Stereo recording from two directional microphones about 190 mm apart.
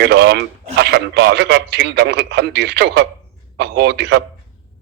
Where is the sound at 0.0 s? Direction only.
60° right (ahead or behind).